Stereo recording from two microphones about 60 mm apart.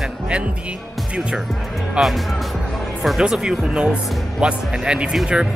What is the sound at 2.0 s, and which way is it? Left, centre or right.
Speech, centre.